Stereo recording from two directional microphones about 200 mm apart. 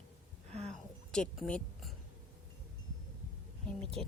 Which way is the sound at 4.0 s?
5° left (ahead or behind).